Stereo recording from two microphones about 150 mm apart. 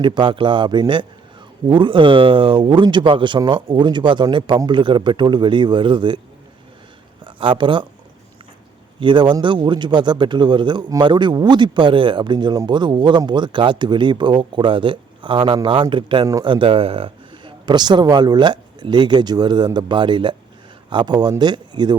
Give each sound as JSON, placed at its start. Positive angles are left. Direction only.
{"t": 0.0, "sound": "speech", "side_deg": -30}
{"t": 7.3, "sound": "speech", "side_deg": -35}
{"t": 9.0, "sound": "speech", "side_deg": -30}